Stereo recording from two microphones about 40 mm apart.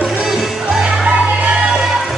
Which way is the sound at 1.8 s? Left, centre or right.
Centre.